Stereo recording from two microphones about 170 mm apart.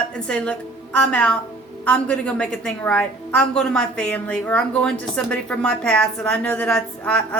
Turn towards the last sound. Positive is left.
turn(degrees=5)  # may be behind; listen again after turning